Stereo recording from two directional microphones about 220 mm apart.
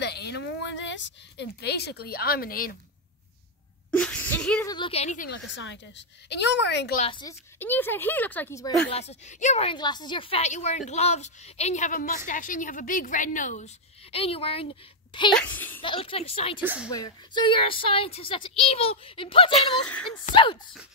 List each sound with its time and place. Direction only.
0.0 s speech: 50° left (ahead or behind)
3.9 s a sound: 5° left (ahead or behind)
4.6 s speech: 20° left (ahead or behind)
5.3 s a woman's voice: 55° left (ahead or behind)
7.0 s speech: 20° left (ahead or behind)
7.5 s speech: 10° left (ahead or behind)
8.9 s a woman's voice: 30° left (ahead or behind)
15.3 s speech: 10° left (ahead or behind)
15.8 s speech: 25° left (ahead or behind)
16.6 s speech: 5° right (ahead or behind)
16.9 s speech: 20° left (ahead or behind)
19.5 s speech: 5° left (ahead or behind)